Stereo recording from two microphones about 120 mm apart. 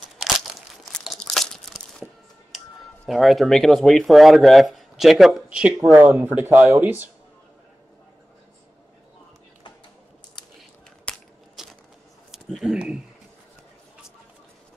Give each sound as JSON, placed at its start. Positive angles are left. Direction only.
{"t": 0.2, "sound": "crunch", "side_deg": 0}
{"t": 3.1, "sound": "speech", "side_deg": 0}
{"t": 5.8, "sound": "speech", "side_deg": -25}
{"t": 11.1, "sound": "crushing", "side_deg": 10}
{"t": 11.6, "sound": "a sound", "side_deg": -5}